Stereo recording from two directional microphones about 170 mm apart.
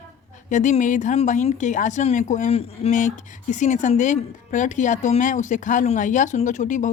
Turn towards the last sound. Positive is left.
turn(degrees=45)  # may be behind; listen again after turning